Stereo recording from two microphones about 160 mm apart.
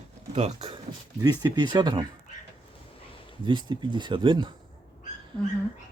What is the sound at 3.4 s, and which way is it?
Speech, 30° right (ahead or behind).